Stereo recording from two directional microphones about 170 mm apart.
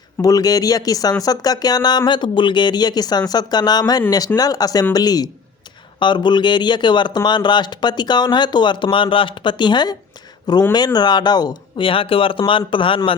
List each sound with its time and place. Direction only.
0.2 s speech: 20° left (ahead or behind)